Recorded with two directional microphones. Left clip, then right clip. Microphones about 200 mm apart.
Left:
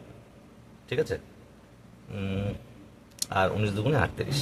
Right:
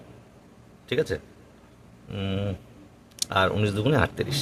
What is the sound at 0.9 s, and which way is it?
A man's voice, 40° right (ahead or behind).